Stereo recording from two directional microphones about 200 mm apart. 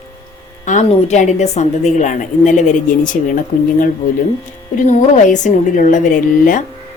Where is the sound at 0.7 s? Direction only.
35° left (ahead or behind).